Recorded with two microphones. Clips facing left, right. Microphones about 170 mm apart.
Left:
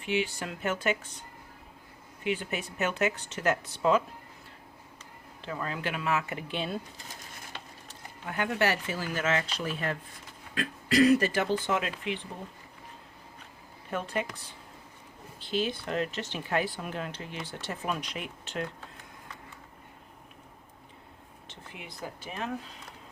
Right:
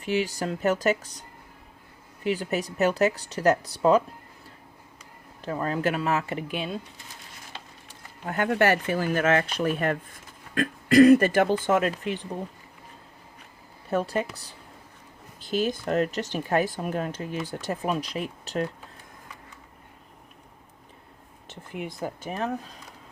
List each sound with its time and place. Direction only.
0.0 s speech: 40° right (ahead or behind)
2.2 s speech: 40° right (ahead or behind)
5.4 s speech: 40° right (ahead or behind)
8.2 s speech: 45° right (ahead or behind)
13.9 s speech: 40° right (ahead or behind)
15.4 s speech: 45° right (ahead or behind)
21.5 s speech: 50° right (ahead or behind)